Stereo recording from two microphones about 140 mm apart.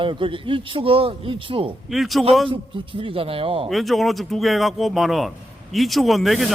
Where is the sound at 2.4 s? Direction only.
40° right (ahead or behind).